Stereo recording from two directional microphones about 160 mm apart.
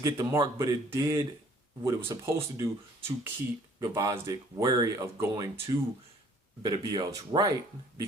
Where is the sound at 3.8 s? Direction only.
20° right (ahead or behind).